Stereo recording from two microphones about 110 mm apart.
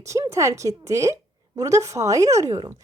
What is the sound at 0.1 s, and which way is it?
A woman's voice, 30° right (ahead or behind).